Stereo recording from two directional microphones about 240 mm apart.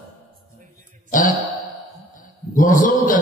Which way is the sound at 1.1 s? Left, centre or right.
Left.